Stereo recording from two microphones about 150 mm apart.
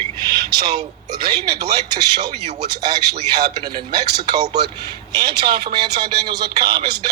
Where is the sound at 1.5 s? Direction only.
25° right (ahead or behind).